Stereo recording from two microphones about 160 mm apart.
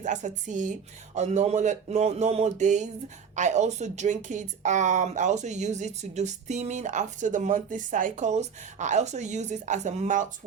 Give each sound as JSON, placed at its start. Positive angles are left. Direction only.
{"t": 0.0, "sound": "speech", "side_deg": -50}